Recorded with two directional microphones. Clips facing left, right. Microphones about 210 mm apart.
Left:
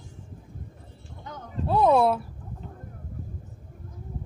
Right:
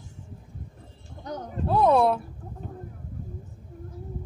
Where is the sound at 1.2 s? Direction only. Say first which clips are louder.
Right 7 dB; 40° right (ahead or behind).